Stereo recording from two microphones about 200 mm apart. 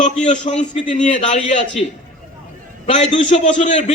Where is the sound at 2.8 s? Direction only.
30° left (ahead or behind).